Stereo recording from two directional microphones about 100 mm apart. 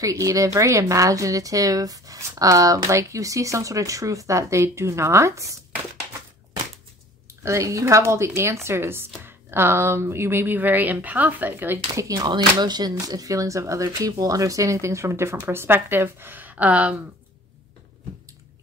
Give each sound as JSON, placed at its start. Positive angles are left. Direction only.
{"t": 0.0, "sound": "a woman's voice", "side_deg": -35}
{"t": 7.4, "sound": "speech", "side_deg": -30}
{"t": 11.9, "sound": "a woman's voice", "side_deg": -40}